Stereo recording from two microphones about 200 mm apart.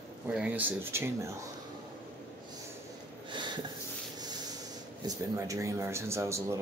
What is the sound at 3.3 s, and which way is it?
Sniff, 25° right (ahead or behind).